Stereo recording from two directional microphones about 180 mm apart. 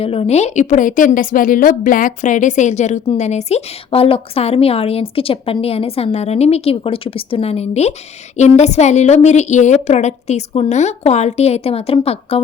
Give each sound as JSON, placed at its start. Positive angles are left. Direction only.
{"t": 0.0, "sound": "a woman's voice", "side_deg": 35}